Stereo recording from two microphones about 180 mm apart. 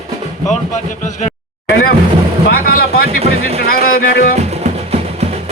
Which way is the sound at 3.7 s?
55° left (ahead or behind).